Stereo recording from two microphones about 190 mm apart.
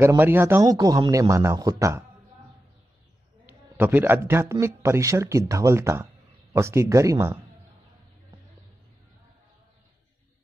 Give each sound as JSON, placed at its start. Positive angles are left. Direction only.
{"t": 0.0, "sound": "a man's voice", "side_deg": -10}
{"t": 3.4, "sound": "a man's voice", "side_deg": -10}